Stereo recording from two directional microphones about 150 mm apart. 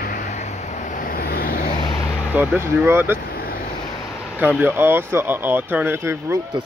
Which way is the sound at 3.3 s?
85° left.